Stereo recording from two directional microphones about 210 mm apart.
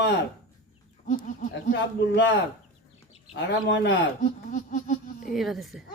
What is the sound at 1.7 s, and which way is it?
Speech, 60° left (ahead or behind).